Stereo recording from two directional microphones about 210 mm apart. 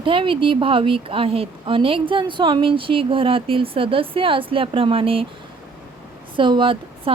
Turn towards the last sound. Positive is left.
turn(degrees=-25)  # may be behind; listen again after turning